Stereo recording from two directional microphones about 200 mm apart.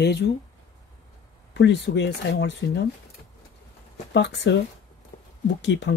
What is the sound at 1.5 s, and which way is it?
Speech, 60° left (ahead or behind).